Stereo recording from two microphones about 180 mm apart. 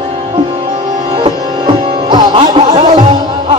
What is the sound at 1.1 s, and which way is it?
Music, 25° right (ahead or behind).